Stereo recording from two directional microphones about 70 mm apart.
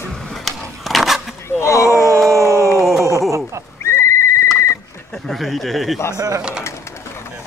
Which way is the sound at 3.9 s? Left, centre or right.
Left.